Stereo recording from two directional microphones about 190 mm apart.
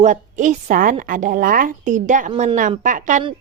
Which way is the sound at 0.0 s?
40° right (ahead or behind).